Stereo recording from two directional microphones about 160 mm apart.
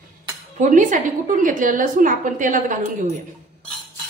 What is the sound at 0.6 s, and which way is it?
A woman's voice, 50° right (ahead or behind).